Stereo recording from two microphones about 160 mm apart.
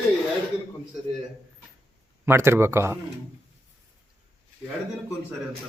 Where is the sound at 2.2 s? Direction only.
15° right (ahead or behind).